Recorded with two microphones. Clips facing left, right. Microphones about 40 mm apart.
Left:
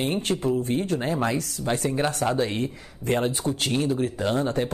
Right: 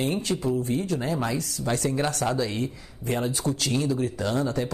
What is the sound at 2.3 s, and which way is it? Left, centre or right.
Speech, left.